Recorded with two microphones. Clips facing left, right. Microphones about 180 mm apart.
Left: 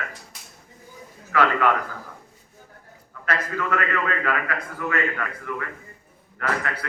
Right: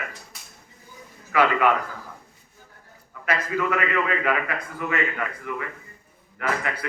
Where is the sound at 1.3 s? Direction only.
10° right (ahead or behind).